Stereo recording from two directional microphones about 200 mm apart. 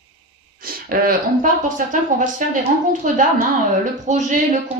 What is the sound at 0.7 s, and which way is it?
Speech, 45° right (ahead or behind).